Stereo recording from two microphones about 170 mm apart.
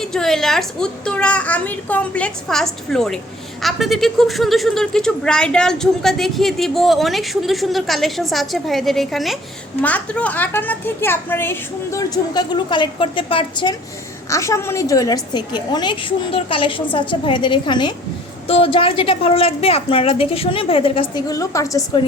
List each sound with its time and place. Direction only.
0.0 s a woman's voice: centre (ahead or behind); by 13.7 s 30° left (ahead or behind)
14.3 s a woman's voice: 15° left (ahead or behind)